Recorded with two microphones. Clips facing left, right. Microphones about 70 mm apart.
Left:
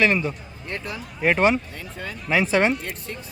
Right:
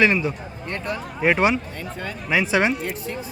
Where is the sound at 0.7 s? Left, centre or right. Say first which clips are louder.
Right 3 dB; centre.